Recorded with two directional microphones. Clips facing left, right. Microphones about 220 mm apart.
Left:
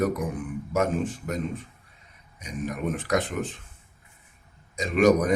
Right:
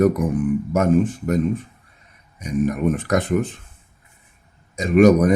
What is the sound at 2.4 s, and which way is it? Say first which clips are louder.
Speech: right 10 dB; 50° right (ahead or behind).